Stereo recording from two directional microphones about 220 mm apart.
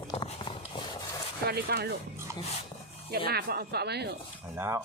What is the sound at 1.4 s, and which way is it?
Speech, 45° right (ahead or behind).